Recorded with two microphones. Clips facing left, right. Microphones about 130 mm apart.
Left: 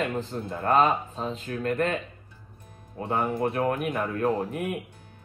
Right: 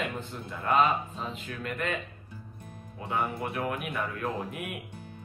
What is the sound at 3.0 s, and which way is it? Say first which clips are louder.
Speech: left 5 dB; 40° left (ahead or behind).